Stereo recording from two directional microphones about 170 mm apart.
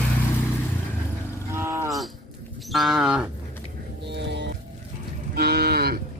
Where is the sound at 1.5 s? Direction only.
15° right (ahead or behind).